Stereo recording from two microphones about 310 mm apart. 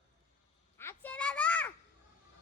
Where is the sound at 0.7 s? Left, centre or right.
Centre.